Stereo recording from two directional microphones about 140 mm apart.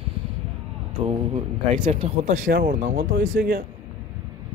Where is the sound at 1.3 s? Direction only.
45° right (ahead or behind); by 2.8 s 65° right (ahead or behind).